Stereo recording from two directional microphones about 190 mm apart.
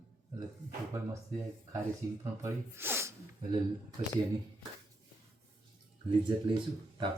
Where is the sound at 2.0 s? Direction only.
15° right (ahead or behind).